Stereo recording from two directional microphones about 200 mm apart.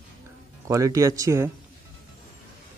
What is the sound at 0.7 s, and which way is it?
Speech, 15° right (ahead or behind).